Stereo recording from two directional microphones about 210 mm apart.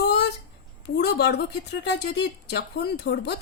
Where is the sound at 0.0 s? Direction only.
50° left (ahead or behind).